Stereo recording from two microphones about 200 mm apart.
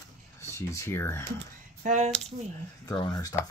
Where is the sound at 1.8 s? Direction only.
35° right (ahead or behind).